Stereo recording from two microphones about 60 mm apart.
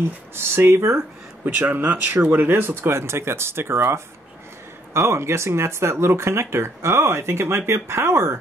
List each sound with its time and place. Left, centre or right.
0.3 s speech: right
1.6 s speech: right